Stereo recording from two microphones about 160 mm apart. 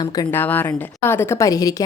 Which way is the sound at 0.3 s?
10° left (ahead or behind).